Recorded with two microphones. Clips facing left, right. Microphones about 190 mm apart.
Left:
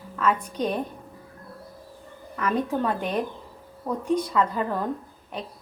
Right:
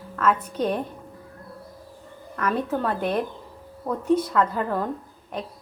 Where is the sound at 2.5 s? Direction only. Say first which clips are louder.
Even; 5° right (ahead or behind).